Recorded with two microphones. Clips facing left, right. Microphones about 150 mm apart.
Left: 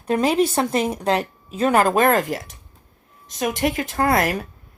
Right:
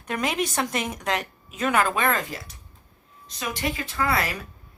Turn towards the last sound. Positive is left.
turn(degrees=50)  # may be behind; listen again after turning